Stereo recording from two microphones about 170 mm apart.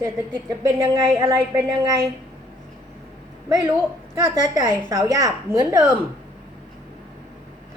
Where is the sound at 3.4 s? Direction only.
15° right (ahead or behind).